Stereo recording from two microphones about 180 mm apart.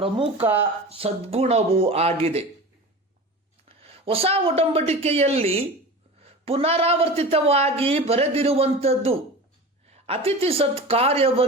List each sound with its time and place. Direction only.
0.3 s speech: 10° right (ahead or behind)
0.9 s speech: 35° right (ahead or behind)
3.7 s speech: 30° right (ahead or behind)